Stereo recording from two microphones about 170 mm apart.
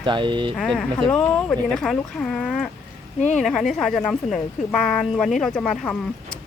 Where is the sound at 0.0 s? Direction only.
30° right (ahead or behind).